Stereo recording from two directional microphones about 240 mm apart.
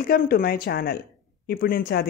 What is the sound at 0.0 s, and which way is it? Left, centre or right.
Speech, left.